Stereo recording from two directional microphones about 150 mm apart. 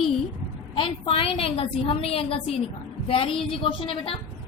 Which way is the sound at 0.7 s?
35° left (ahead or behind).